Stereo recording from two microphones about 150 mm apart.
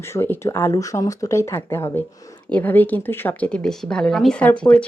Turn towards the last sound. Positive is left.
turn(degrees=10)  # may be behind; listen again after turning